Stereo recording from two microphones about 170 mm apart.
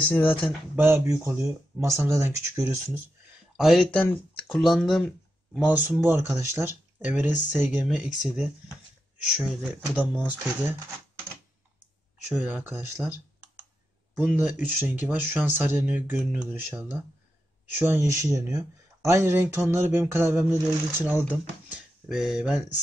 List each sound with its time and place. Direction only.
0.1 s speech: 10° left (ahead or behind)
0.7 s speech: 15° right (ahead or behind)
3.5 s speech: centre (ahead or behind)
9.3 s speech: 5° right (ahead or behind)
12.3 s speech: 10° right (ahead or behind)
21.6 s a sound: 5° right (ahead or behind)